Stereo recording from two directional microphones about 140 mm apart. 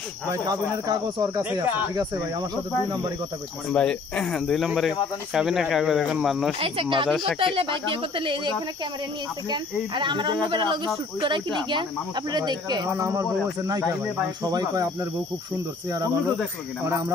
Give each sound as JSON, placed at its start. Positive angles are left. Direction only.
{"t": 0.3, "sound": "speech", "side_deg": -25}
{"t": 3.7, "sound": "speech", "side_deg": 5}
{"t": 6.6, "sound": "speech", "side_deg": -40}
{"t": 9.5, "sound": "speech", "side_deg": -35}